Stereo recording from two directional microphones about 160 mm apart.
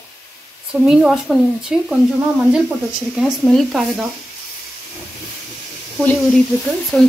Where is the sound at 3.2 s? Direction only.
Centre (ahead or behind).